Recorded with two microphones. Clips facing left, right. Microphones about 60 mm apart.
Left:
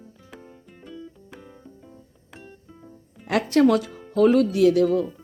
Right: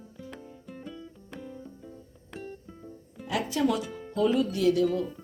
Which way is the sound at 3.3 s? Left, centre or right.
Left.